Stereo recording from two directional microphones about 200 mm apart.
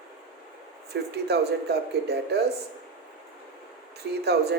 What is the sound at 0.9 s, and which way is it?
Speech, 55° right (ahead or behind).